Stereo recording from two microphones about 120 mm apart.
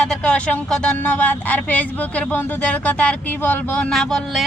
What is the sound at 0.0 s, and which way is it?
Speech, 5° left (ahead or behind).